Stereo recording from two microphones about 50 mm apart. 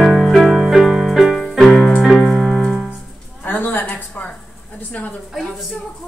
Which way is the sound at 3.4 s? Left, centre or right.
Left.